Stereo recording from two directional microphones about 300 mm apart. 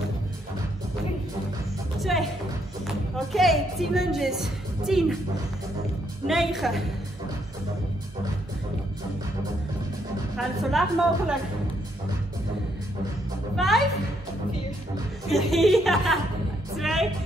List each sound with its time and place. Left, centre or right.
2.0 s music: centre
3.3 s a woman's voice: centre
6.2 s a woman's voice: centre
10.3 s a woman's voice: centre
13.6 s a woman's voice: centre
15.2 s a woman's voice: centre
16.7 s music: centre